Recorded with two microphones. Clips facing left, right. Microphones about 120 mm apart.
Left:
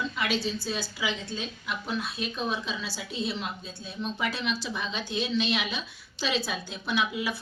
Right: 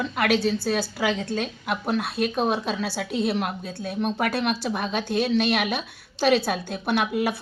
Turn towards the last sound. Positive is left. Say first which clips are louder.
# right 6 dB
turn(degrees=-55)  # may be behind; listen again after turning